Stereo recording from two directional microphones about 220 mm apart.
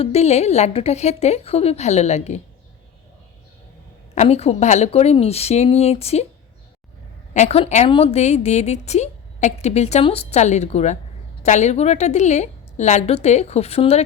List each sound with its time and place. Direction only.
0.0 s a woman's voice: 30° left (ahead or behind)
4.1 s a woman's voice: 30° left (ahead or behind)
7.3 s a woman's voice: 30° left (ahead or behind)